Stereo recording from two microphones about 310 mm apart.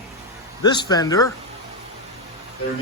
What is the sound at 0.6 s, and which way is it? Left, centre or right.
Speech, centre.